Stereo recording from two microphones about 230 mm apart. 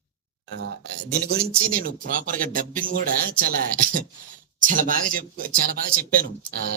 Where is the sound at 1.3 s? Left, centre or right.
Right.